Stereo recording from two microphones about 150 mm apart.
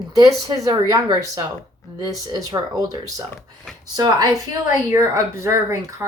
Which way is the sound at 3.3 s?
Centre (ahead or behind).